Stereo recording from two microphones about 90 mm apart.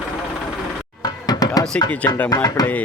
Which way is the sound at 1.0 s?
45° left (ahead or behind).